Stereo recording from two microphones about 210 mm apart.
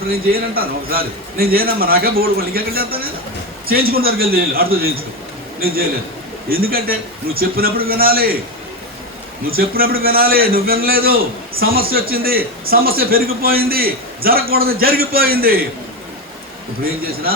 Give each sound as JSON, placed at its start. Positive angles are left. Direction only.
{"t": 0.1, "sound": "a man's voice", "side_deg": -45}
{"t": 9.5, "sound": "a man's voice", "side_deg": -45}